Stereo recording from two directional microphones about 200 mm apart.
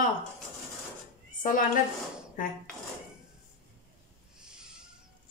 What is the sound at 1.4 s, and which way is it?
Speech, 40° left (ahead or behind).